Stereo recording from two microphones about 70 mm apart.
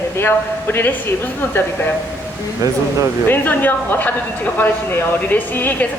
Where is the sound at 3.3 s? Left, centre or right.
Left.